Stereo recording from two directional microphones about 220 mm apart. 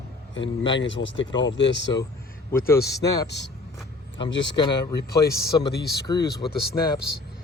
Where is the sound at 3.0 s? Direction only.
15° left (ahead or behind).